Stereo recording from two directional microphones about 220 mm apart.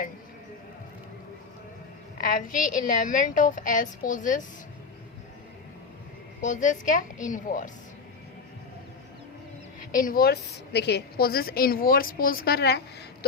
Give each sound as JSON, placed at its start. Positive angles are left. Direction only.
{"t": 2.2, "sound": "a woman's voice", "side_deg": 40}
{"t": 6.4, "sound": "a woman's voice", "side_deg": 35}
{"t": 9.9, "sound": "a woman's voice", "side_deg": 40}